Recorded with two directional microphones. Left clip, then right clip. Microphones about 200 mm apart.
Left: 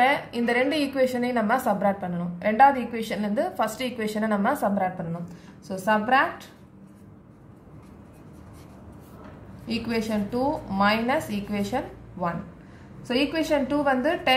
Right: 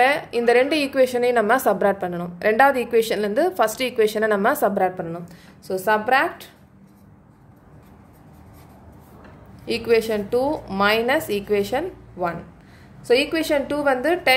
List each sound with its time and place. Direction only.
0.0 s a woman's voice: 45° right (ahead or behind)
9.7 s a woman's voice: 55° right (ahead or behind)